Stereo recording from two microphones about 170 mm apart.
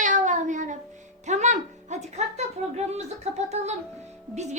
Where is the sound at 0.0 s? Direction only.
45° right (ahead or behind).